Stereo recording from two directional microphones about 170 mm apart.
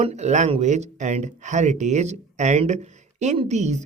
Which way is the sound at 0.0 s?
40° right (ahead or behind).